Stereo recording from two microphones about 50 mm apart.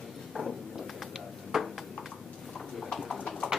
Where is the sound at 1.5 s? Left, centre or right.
Centre.